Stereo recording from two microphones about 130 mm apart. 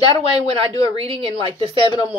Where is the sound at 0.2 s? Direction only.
45° right (ahead or behind).